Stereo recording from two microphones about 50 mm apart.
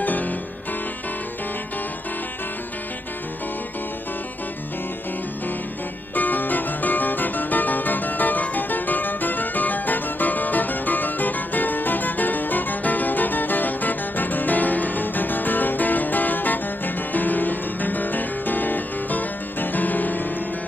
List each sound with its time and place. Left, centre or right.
0.0 s music: left
6.1 s music: left